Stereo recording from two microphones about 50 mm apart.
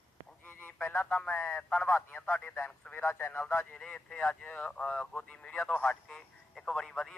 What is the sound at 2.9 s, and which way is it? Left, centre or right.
Speech, left.